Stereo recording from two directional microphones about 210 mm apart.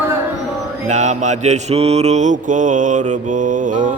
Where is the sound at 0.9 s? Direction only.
35° right (ahead or behind).